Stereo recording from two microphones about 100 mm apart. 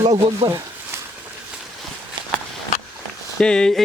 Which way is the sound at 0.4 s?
85° right.